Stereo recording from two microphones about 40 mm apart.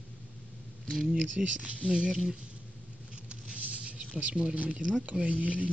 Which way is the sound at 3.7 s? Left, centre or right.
Right.